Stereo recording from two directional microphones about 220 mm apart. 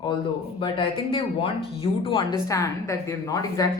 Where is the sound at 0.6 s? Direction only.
25° left (ahead or behind).